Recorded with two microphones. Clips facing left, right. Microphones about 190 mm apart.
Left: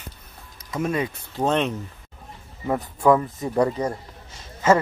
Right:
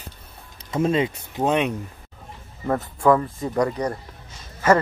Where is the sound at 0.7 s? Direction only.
25° right (ahead or behind).